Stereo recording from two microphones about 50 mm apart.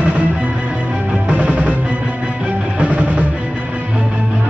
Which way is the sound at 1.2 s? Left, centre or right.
Right.